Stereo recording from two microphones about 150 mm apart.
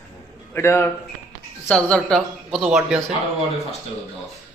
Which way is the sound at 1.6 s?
5° left (ahead or behind).